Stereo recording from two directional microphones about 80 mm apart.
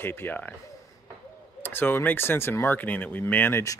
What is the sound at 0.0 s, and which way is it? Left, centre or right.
Speech, left.